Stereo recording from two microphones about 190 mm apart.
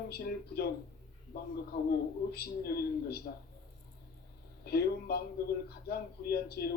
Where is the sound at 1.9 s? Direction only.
55° left (ahead or behind).